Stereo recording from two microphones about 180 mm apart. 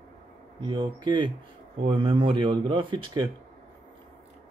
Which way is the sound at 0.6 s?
25° right (ahead or behind).